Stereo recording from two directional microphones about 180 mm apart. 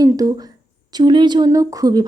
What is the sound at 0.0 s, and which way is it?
A woman's voice, 20° right (ahead or behind).